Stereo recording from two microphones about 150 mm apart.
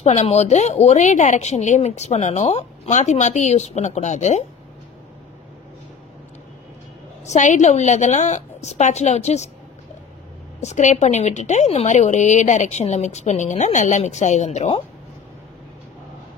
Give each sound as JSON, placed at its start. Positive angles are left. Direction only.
{"t": 0.0, "sound": "speech", "side_deg": 45}
{"t": 7.2, "sound": "speech", "side_deg": 55}
{"t": 10.6, "sound": "speech", "side_deg": 50}